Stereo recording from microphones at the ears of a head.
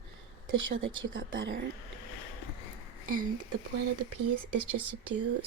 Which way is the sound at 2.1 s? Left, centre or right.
Left.